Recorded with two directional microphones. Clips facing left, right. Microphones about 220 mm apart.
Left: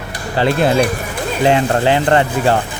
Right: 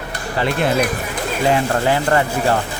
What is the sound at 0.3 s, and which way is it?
Speech, 30° left (ahead or behind).